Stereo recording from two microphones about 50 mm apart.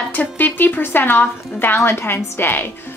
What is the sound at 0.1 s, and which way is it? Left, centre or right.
A woman's voice, left.